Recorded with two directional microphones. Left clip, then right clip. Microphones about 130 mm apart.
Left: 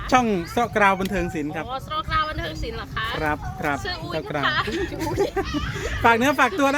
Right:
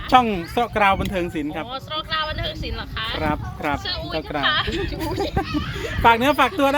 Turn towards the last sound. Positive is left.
turn(degrees=15)  # may be behind; listen again after turning